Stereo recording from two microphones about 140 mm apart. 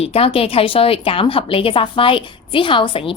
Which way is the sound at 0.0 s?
45° left (ahead or behind).